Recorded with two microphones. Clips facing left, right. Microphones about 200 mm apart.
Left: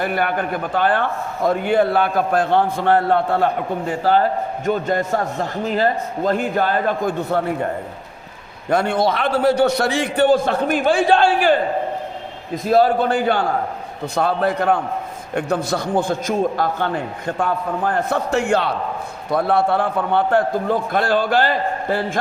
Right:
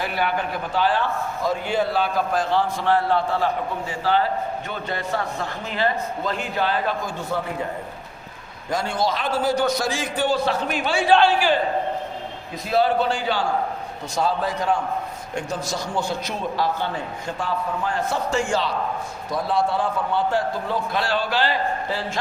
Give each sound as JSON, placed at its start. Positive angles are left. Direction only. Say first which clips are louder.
{"t": 0.0, "sound": "a man's voice", "louder": "left 4 dB", "side_deg": 50}
{"t": 8.7, "sound": "a man's voice", "louder": "left 6 dB", "side_deg": 60}
{"t": 12.6, "sound": "a man's voice", "louder": "left 5 dB", "side_deg": 50}